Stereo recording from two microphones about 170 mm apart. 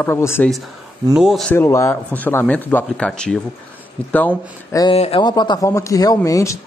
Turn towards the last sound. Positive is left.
turn(degrees=20)  # may be behind; listen again after turning